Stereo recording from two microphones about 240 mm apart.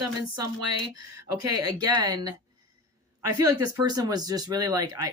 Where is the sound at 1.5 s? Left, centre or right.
Centre.